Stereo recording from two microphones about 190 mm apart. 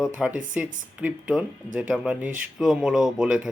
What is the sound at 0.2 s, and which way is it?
Speech, 5° right (ahead or behind).